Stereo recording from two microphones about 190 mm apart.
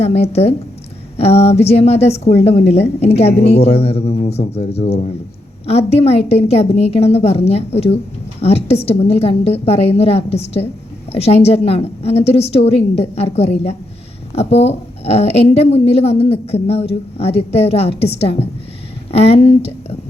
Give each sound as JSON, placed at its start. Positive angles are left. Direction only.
{"t": 0.0, "sound": "a woman's voice", "side_deg": 30}